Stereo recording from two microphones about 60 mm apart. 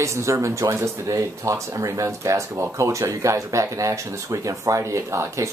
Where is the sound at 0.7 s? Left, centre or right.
Right.